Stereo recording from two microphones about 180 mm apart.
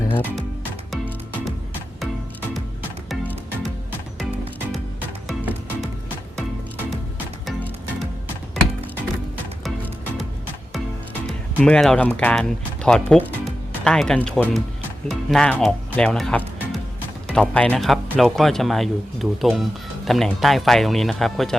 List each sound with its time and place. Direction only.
0.1 s speech: 10° left (ahead or behind)
0.9 s music: centre (ahead or behind)
3.1 s music: centre (ahead or behind)
4.7 s music: 10° right (ahead or behind)
7.4 s music: centre (ahead or behind)
11.3 s speech: centre (ahead or behind)